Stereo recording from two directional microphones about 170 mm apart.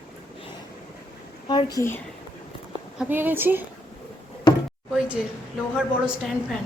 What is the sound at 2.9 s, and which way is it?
Speech, 10° right (ahead or behind).